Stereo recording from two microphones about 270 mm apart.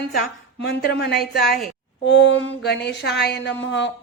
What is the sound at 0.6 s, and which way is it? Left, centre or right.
A woman's voice, left.